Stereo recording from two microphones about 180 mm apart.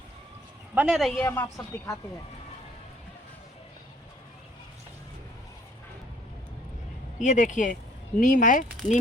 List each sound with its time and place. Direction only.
0.7 s speech: 5° right (ahead or behind)
1.2 s a woman's voice: 10° left (ahead or behind)
7.2 s speech: 45° left (ahead or behind)